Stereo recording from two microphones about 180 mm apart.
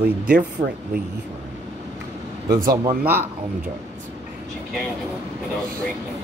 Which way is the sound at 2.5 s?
20° right (ahead or behind).